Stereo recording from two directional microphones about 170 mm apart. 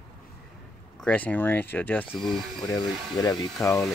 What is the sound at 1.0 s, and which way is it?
Speech, 10° left (ahead or behind).